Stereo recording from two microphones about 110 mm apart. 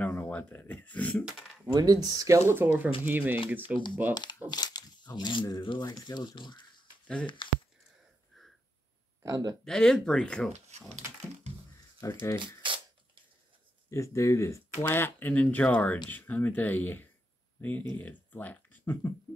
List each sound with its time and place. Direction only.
0.0 s speech: 15° left (ahead or behind)
1.7 s speech: 35° right (ahead or behind); by 3.7 s 15° right (ahead or behind)
4.1 s speech: 40° left (ahead or behind)
9.2 s speech: 35° right (ahead or behind)
9.7 s speech: 5° left (ahead or behind)
10.7 s speech: 80° right
12.0 s speech: 25° left (ahead or behind)
12.6 s a sound: 50° right (ahead or behind)
13.8 s speech: 25° left (ahead or behind)